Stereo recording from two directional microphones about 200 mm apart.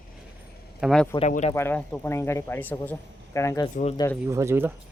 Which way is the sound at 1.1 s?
35° left (ahead or behind).